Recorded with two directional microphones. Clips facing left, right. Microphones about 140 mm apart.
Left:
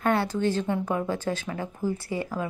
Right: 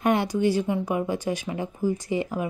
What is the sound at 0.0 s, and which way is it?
A woman's voice, 15° right (ahead or behind).